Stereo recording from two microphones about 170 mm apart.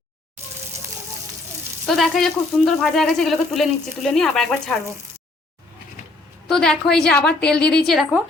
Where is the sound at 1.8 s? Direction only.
Centre (ahead or behind).